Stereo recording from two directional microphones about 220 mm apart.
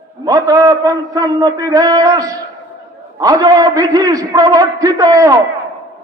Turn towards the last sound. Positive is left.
turn(degrees=-15)  # may be behind; listen again after turning